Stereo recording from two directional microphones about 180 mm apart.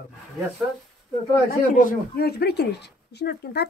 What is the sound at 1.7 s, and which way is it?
Speech, 50° left (ahead or behind).